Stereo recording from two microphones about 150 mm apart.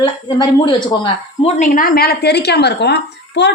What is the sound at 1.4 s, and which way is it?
Speech, 60° left (ahead or behind).